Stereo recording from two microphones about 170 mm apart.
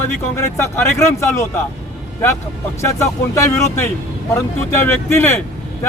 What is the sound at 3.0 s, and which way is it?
Speech, 15° left (ahead or behind).